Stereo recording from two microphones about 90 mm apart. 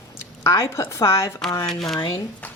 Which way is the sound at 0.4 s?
35° left (ahead or behind).